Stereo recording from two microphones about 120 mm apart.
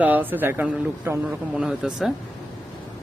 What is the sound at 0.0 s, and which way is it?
Speech, 15° right (ahead or behind).